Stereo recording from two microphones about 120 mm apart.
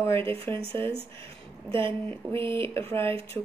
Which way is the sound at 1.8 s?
45° right (ahead or behind).